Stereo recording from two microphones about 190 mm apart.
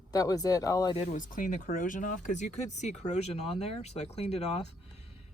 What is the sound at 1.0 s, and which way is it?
Speech, 40° left (ahead or behind).